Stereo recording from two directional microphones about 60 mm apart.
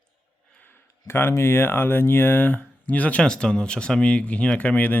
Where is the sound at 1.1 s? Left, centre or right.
Left.